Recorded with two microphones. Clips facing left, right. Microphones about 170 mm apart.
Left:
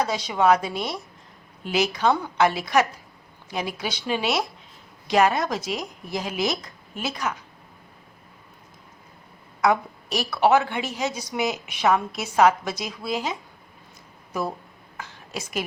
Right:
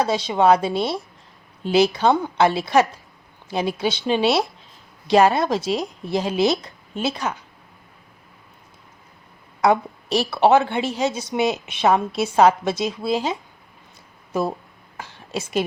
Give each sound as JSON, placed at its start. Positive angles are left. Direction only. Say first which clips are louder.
{"t": 0.0, "sound": "a woman's voice", "louder": "right 4 dB", "side_deg": -30}
{"t": 9.6, "sound": "a woman's voice", "louder": "right 3 dB", "side_deg": -30}
{"t": 14.3, "sound": "a woman's voice", "louder": "right 5 dB", "side_deg": -25}